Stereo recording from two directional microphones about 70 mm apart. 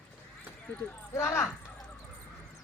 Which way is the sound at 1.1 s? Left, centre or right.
Left.